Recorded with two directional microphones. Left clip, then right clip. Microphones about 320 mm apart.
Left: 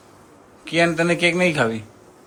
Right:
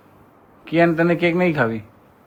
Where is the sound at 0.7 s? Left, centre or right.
Centre.